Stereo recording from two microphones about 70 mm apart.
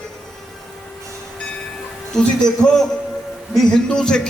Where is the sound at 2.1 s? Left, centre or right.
Centre.